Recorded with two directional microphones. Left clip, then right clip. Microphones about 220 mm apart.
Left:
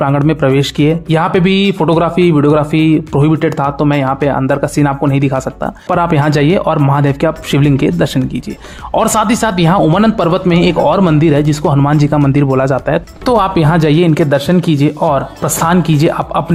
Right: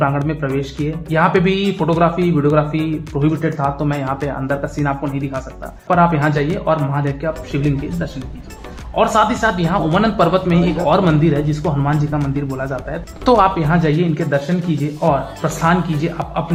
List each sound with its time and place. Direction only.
0.3 s speech: 40° left (ahead or behind)
10.6 s speech: centre (ahead or behind)
10.8 s speech: 35° left (ahead or behind)
15.6 s speech: 35° left (ahead or behind)